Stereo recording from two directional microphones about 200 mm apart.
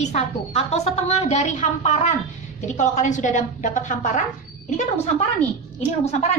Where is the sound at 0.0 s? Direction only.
35° left (ahead or behind).